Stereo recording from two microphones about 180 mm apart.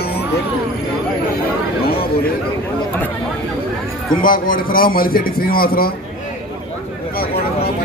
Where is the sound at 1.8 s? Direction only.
55° left (ahead or behind).